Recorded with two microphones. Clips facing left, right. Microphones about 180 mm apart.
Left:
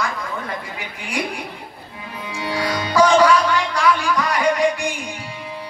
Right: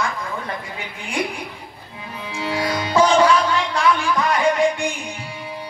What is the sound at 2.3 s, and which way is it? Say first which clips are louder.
Speech: even; 25° right (ahead or behind).